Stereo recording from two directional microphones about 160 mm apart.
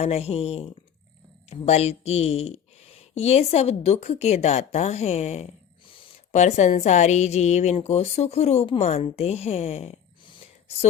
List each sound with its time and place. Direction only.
0.0 s a woman's voice: 40° left (ahead or behind)
6.3 s a woman's voice: 45° left (ahead or behind); by 10.8 s 30° left (ahead or behind)